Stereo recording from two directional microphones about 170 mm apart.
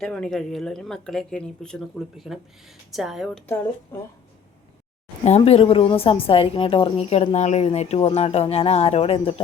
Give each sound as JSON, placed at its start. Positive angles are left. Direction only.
{"t": 0.0, "sound": "speech", "side_deg": 5}
{"t": 5.4, "sound": "speech", "side_deg": 35}